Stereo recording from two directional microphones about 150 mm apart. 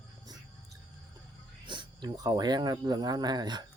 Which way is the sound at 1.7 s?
30° right (ahead or behind).